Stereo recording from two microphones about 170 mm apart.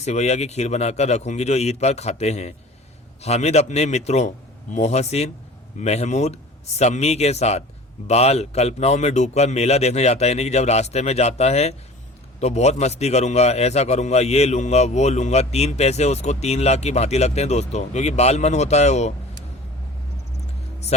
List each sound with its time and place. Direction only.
0.0 s a man's voice: 40° left (ahead or behind)